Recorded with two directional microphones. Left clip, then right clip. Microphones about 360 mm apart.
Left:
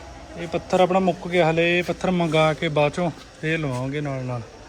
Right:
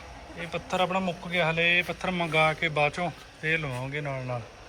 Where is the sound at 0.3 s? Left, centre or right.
Centre.